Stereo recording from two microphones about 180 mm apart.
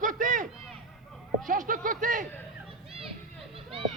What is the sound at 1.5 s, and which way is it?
Speech, 50° right (ahead or behind).